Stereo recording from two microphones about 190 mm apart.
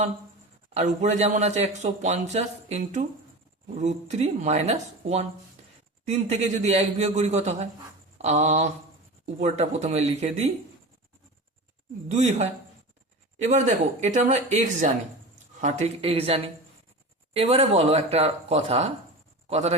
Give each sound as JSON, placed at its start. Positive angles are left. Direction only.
{"t": 0.7, "sound": "speech", "side_deg": -35}
{"t": 12.1, "sound": "speech", "side_deg": -35}